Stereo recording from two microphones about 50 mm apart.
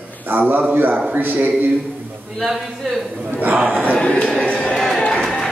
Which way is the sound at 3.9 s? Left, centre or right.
Left.